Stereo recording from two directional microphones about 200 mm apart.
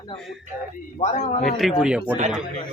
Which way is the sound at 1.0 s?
35° left (ahead or behind).